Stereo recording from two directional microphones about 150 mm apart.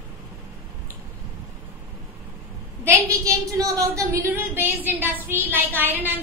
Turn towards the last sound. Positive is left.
turn(degrees=-15)  # may be behind; listen again after turning